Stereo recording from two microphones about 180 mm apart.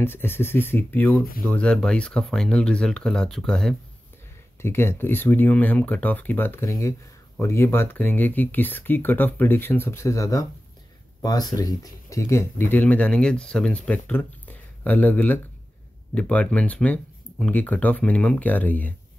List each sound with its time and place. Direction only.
0.0 s speech: 10° left (ahead or behind)
4.6 s speech: 15° left (ahead or behind)